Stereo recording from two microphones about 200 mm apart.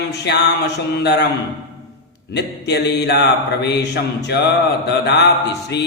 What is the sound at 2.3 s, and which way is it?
A man's voice, 55° left (ahead or behind).